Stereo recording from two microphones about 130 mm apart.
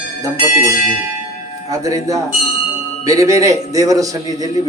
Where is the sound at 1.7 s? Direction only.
25° right (ahead or behind).